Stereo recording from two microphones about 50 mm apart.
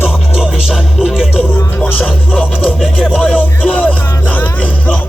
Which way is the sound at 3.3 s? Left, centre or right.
Left.